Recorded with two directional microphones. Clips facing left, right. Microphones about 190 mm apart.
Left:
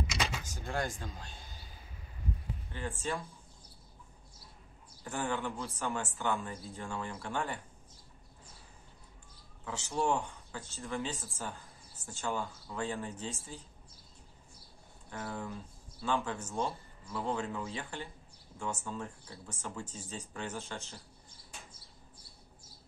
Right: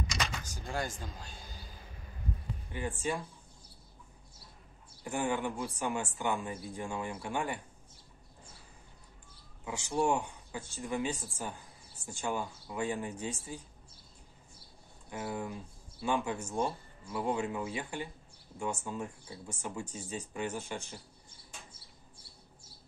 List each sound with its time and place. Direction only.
0.0 s speech: 5° left (ahead or behind)
2.7 s speech: 15° right (ahead or behind)
5.0 s speech: 15° right (ahead or behind)
9.7 s speech: 10° right (ahead or behind)
15.0 s speech: 10° right (ahead or behind)